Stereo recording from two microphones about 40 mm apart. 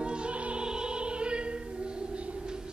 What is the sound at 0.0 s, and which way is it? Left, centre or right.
Opera, right.